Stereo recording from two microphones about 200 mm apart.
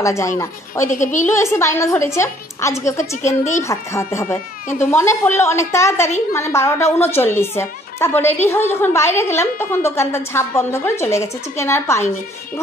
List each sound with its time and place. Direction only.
0.0 s a woman's voice: 15° left (ahead or behind)
0.8 s a woman's voice: 40° left (ahead or behind)
1.2 s a woman's voice: 10° left (ahead or behind)
3.0 s a woman's voice: 35° left (ahead or behind)
3.6 s a woman's voice: 15° left (ahead or behind)